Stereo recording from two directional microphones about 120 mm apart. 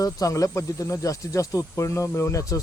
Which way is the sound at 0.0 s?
30° left (ahead or behind).